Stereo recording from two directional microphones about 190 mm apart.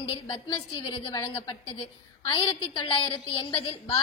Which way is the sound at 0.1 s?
25° left (ahead or behind).